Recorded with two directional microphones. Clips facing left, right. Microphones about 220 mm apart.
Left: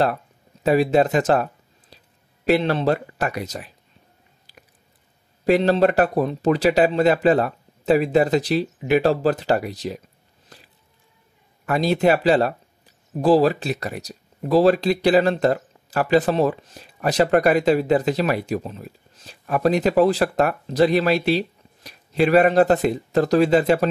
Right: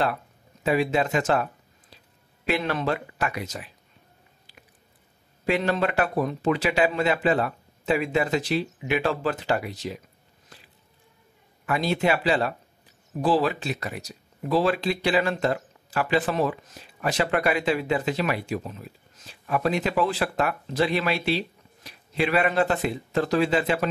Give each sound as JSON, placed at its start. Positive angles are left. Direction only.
{"t": 0.7, "sound": "speech", "side_deg": 40}
{"t": 5.4, "sound": "speech", "side_deg": 35}
{"t": 10.5, "sound": "a sound", "side_deg": 40}
{"t": 11.6, "sound": "speech", "side_deg": 40}